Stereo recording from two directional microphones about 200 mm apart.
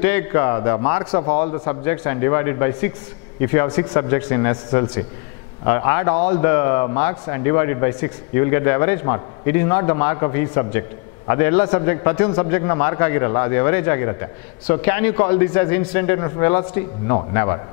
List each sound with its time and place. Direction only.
0.0 s a man's voice: 15° left (ahead or behind)